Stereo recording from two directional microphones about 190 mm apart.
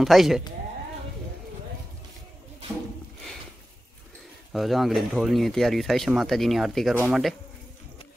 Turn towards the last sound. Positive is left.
turn(degrees=0)  # may be behind; listen again after turning